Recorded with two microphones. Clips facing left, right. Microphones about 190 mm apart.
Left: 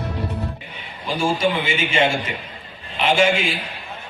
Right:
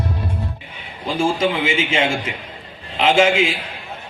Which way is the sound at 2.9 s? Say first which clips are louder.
Right 3 dB; 90° right.